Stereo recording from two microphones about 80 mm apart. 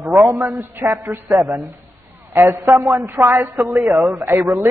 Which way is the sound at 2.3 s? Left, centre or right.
Right.